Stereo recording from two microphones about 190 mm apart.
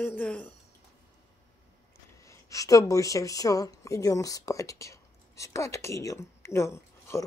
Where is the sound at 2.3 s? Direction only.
15° left (ahead or behind).